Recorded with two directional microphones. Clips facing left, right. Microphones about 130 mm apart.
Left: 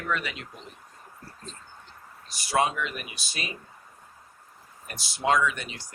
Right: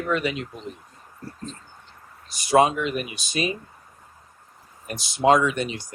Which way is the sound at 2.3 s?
20° right (ahead or behind).